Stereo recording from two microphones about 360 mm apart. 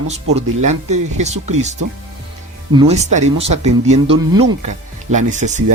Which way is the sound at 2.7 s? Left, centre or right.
Centre.